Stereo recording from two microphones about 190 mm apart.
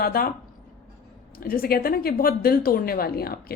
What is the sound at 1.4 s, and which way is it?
A woman's voice, 50° left (ahead or behind).